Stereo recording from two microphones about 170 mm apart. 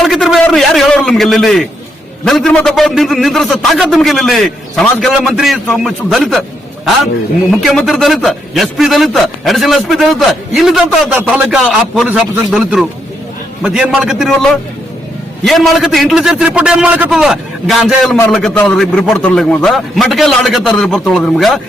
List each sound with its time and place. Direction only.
0.0 s a sound: centre (ahead or behind)
2.2 s a man's voice: centre (ahead or behind)
7.6 s a man's voice: centre (ahead or behind)